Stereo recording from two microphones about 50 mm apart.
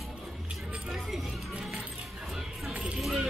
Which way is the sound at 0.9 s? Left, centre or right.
Centre.